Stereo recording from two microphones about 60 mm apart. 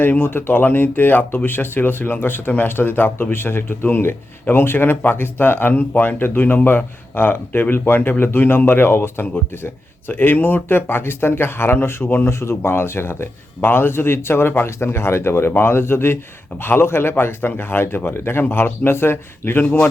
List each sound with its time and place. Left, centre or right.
0.0 s speech: left
12.3 s speech: left